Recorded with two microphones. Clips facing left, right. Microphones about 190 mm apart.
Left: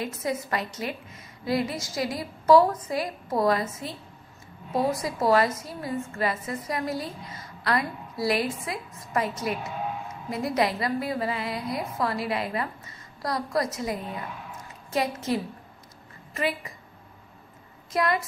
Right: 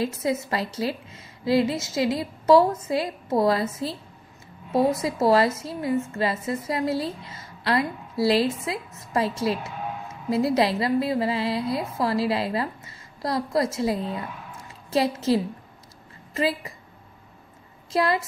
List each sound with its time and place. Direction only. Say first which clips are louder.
0.0 s a woman's voice: right 4 dB; 30° right (ahead or behind)
17.9 s a woman's voice: right 2 dB; 30° right (ahead or behind)